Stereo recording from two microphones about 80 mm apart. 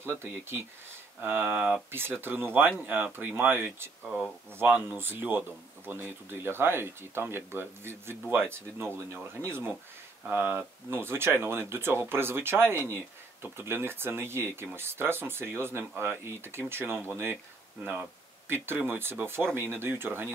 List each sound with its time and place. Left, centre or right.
0.0 s speech: right
18.5 s speech: right